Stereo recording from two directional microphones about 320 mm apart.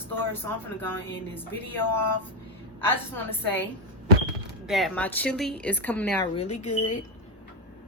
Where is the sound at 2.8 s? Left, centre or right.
Centre.